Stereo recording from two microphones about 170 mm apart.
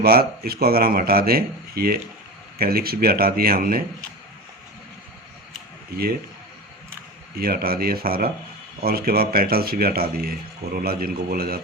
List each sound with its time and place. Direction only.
0.0 s speech: 60° right (ahead or behind)
7.3 s speech: 60° right (ahead or behind)